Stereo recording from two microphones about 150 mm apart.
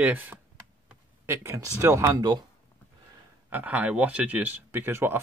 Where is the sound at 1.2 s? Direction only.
15° right (ahead or behind).